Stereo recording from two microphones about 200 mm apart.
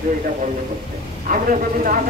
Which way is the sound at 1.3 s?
45° right (ahead or behind).